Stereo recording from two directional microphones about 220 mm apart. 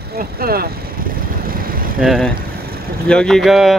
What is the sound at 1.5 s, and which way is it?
Vehicle, 40° right (ahead or behind).